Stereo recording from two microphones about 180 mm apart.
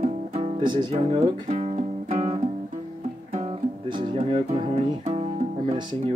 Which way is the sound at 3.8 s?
25° right (ahead or behind).